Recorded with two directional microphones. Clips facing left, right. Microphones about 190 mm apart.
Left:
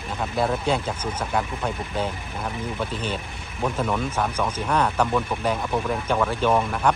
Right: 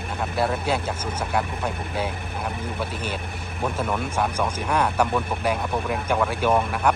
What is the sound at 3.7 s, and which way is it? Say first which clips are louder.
Speech: even; 10° right (ahead or behind).